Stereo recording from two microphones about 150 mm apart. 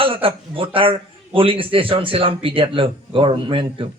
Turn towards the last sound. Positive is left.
turn(degrees=-35)  # may be behind; listen again after turning